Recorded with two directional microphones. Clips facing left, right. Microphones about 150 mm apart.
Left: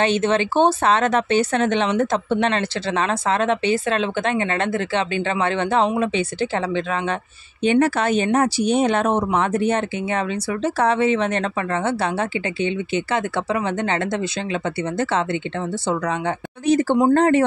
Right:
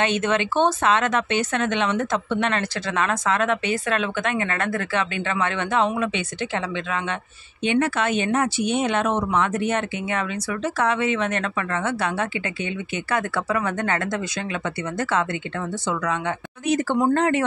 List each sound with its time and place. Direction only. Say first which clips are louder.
0.0 s speech: left 3 dB; 30° left (ahead or behind)